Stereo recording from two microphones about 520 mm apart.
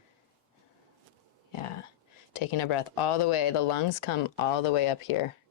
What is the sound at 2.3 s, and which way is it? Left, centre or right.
Speech, left.